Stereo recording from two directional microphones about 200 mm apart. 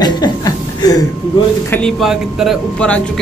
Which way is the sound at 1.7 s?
Centre (ahead or behind).